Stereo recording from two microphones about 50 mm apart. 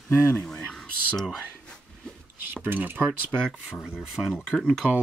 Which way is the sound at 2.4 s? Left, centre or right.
Right.